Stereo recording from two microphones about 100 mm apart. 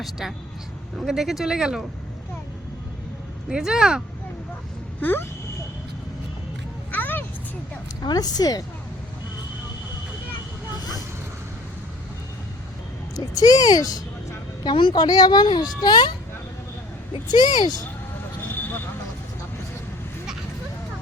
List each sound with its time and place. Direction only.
0.0 s speech: centre (ahead or behind)
3.5 s speech: 5° right (ahead or behind)
4.9 s speech: 20° left (ahead or behind)
6.9 s vehicle: 20° left (ahead or behind)
8.0 s speech: 40° left (ahead or behind)
13.1 s speech: 40° left (ahead or behind)
14.6 s a woman's voice: 50° left (ahead or behind)
17.2 s a woman's voice: 45° left (ahead or behind)
18.5 s vehicle: 20° left (ahead or behind)